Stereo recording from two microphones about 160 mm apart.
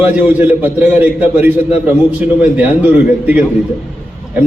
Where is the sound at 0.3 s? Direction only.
10° right (ahead or behind).